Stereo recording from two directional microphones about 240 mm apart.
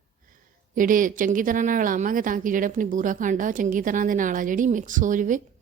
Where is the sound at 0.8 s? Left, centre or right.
Right.